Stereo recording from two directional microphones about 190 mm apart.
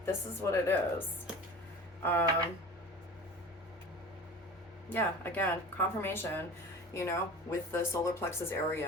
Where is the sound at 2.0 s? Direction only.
10° left (ahead or behind).